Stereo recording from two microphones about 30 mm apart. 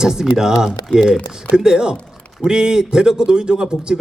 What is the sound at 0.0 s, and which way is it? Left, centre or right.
A man's voice, right.